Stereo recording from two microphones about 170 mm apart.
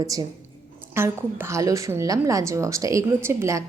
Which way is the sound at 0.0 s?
20° right (ahead or behind).